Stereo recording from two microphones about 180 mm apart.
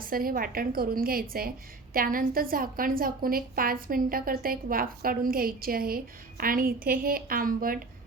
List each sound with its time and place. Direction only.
0.0 s a woman's voice: 55° right (ahead or behind)